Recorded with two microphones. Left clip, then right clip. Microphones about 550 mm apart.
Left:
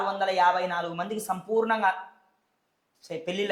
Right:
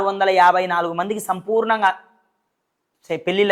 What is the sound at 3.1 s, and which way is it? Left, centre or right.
Speech, right.